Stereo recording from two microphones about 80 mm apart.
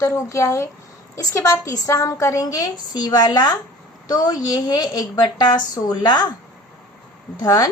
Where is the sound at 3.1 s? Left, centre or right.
Left.